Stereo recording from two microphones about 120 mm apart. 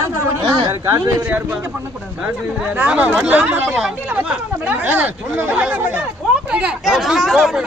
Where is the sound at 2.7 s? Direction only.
15° right (ahead or behind).